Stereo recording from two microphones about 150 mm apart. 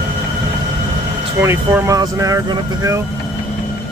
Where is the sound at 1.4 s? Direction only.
20° right (ahead or behind).